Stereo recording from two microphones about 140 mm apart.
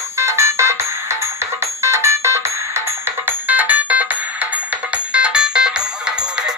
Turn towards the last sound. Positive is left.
turn(degrees=-5)  # may be behind; listen again after turning